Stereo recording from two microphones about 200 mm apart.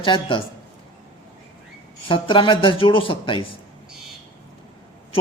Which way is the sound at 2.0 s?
25° left (ahead or behind).